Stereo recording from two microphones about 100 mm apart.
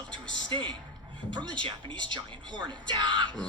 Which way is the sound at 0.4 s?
50° right (ahead or behind).